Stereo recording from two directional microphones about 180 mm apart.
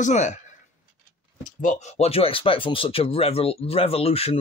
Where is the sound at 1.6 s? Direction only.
40° left (ahead or behind).